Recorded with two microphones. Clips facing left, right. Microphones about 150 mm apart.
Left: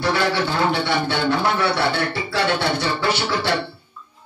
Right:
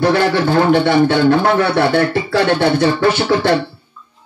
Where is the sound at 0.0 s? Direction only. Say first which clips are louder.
Right 7 dB; 50° right (ahead or behind).